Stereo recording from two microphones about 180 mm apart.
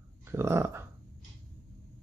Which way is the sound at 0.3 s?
15° right (ahead or behind).